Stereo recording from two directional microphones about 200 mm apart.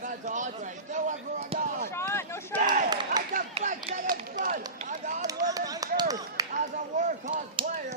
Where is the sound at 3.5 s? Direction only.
30° right (ahead or behind).